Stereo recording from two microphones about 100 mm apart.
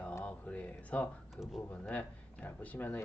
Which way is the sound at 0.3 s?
15° left (ahead or behind).